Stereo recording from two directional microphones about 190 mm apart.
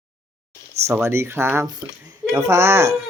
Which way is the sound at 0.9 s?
15° right (ahead or behind).